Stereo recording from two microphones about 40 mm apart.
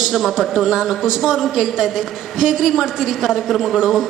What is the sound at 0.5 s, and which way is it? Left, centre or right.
A woman's voice, centre.